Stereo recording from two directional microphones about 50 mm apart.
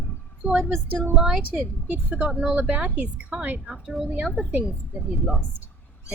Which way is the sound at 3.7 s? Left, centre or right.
Centre.